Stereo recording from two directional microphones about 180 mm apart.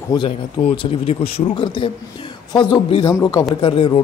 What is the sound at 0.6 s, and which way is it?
A man's voice, 30° left (ahead or behind).